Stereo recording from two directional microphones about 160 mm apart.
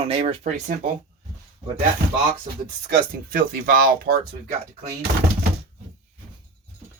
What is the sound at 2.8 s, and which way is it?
Speech, 65° right (ahead or behind).